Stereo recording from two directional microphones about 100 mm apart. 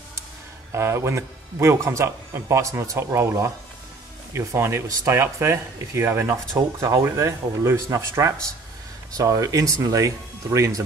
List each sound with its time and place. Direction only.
0.7 s speech: 25° right (ahead or behind)